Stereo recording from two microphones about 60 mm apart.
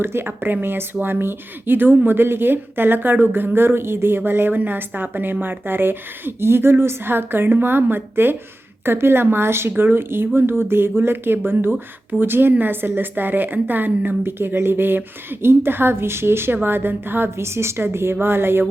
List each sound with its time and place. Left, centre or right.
0.0 s speech: right